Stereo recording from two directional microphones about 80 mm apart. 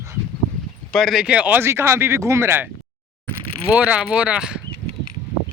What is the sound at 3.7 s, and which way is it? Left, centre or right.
Speech, centre.